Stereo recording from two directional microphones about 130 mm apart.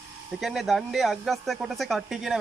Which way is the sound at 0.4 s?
Centre (ahead or behind).